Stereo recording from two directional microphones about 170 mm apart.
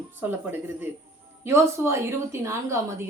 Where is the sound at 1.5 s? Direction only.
15° right (ahead or behind).